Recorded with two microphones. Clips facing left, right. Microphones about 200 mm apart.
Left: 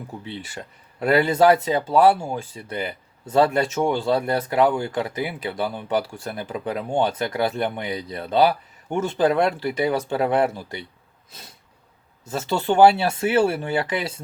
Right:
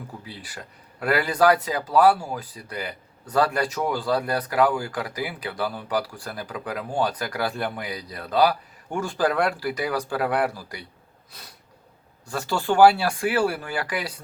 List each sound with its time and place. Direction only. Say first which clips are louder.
0.3 s speech: left 6 dB; 25° left (ahead or behind)
11.3 s snort: left 2 dB; 25° left (ahead or behind)
12.2 s speech: left 3 dB; 20° left (ahead or behind)